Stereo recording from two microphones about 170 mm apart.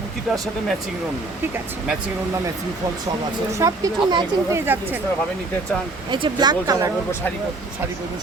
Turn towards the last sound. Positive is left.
turn(degrees=-20)  # may be behind; listen again after turning